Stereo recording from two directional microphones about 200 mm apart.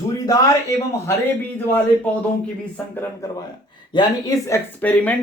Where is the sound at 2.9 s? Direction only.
10° left (ahead or behind).